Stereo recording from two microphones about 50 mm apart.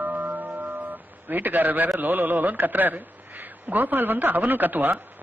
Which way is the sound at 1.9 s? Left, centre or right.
Right.